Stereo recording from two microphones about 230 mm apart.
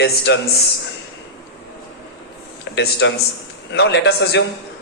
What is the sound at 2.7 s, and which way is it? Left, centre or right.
A man's voice, left.